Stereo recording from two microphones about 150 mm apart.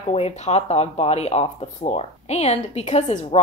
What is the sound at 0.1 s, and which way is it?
Speech, 45° left (ahead or behind).